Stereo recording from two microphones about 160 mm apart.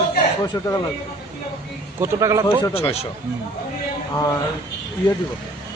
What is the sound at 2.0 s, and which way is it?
Speech, 20° right (ahead or behind).